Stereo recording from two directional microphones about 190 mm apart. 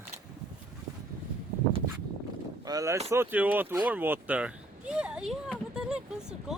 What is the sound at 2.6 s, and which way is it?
Speech, 15° right (ahead or behind).